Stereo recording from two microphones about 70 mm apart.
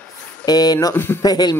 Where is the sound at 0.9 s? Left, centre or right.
Left.